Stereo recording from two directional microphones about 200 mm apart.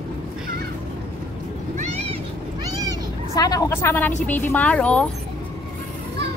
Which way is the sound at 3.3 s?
15° left (ahead or behind).